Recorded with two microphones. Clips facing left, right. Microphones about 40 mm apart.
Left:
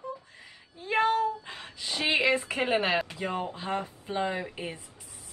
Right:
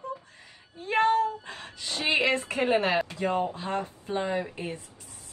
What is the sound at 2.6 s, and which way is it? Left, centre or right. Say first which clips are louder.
Speech: right 4 dB; left.